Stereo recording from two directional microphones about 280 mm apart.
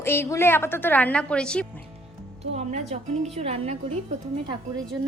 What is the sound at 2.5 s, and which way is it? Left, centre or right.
A woman's voice, right.